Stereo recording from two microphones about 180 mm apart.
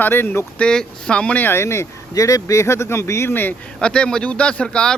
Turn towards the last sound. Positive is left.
turn(degrees=5)  # may be behind; listen again after turning